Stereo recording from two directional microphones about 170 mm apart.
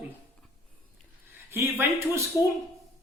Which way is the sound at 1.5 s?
15° right (ahead or behind).